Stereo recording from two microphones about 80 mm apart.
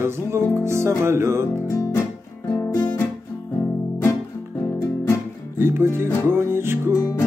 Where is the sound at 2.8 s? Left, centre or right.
Centre.